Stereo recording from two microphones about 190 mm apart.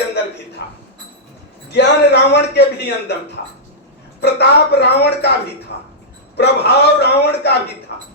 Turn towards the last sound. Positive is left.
turn(degrees=60)  # may be behind; listen again after turning